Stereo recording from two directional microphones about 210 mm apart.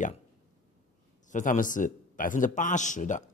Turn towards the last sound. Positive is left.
turn(degrees=35)  # may be behind; listen again after turning